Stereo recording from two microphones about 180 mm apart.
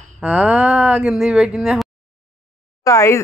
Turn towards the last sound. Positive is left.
turn(degrees=15)  # may be behind; listen again after turning